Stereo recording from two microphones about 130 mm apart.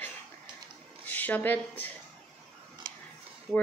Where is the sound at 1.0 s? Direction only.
15° left (ahead or behind).